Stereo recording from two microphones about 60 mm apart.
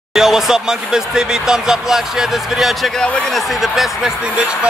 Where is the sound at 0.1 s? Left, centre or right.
Centre.